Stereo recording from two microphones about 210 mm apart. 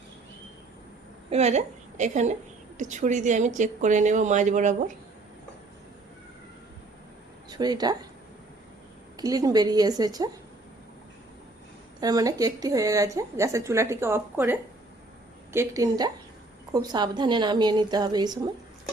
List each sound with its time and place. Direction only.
1.3 s a woman's voice: 30° right (ahead or behind)
7.5 s speech: 20° right (ahead or behind)
9.1 s a woman's voice: 15° right (ahead or behind)
11.9 s a woman's voice: 20° right (ahead or behind)